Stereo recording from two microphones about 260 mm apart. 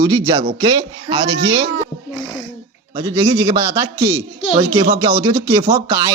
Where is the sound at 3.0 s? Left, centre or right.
Centre.